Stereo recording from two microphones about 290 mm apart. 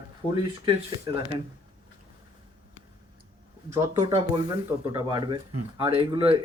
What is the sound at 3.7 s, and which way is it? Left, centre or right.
Speech, centre.